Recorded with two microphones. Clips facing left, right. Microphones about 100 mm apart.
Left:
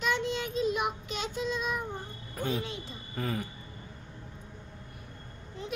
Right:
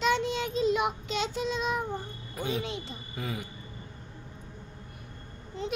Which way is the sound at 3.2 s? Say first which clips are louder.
Left 3 dB; 5° right (ahead or behind).